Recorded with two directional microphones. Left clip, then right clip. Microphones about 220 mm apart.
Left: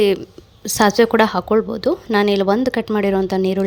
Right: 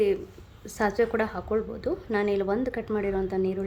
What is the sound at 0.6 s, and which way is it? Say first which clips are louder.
A woman's voice: left 11 dB; 40° left (ahead or behind).